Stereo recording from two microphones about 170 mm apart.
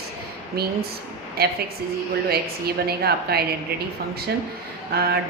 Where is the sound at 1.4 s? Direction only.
70° right (ahead or behind).